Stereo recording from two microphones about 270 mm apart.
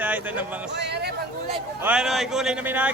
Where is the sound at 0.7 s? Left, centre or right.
Right.